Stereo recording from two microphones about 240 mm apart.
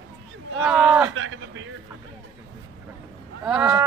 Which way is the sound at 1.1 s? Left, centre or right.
Right.